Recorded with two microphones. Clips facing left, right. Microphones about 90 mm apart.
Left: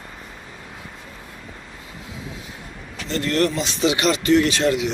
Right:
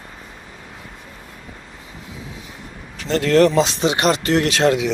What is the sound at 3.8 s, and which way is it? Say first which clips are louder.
Speech: right 1 dB; 45° right (ahead or behind).